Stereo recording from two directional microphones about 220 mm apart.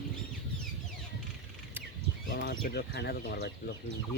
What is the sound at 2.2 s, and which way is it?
Speech, 55° left (ahead or behind).